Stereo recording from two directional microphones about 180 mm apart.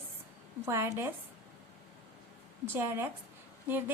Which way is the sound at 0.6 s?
15° right (ahead or behind).